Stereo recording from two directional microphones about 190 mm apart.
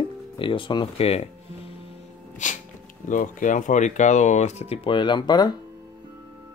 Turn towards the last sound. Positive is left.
turn(degrees=20)  # may be behind; listen again after turning